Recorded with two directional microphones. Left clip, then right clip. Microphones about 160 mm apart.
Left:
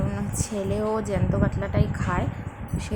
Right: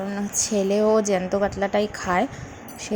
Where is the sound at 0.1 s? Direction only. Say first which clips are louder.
Right 6 dB; 20° right (ahead or behind).